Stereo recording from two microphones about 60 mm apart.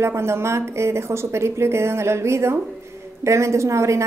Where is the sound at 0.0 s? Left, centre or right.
Right.